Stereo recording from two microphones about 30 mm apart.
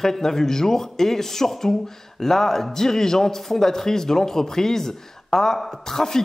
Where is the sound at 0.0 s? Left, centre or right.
Centre.